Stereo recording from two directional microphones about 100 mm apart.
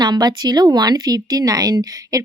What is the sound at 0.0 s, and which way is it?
Speech, 45° right (ahead or behind).